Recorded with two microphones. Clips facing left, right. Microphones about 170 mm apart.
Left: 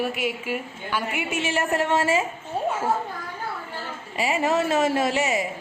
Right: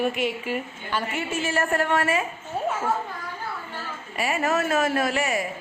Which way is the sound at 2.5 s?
25° left (ahead or behind).